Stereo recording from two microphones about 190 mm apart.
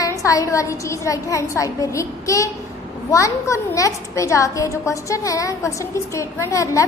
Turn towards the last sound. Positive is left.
turn(degrees=15)  # may be behind; listen again after turning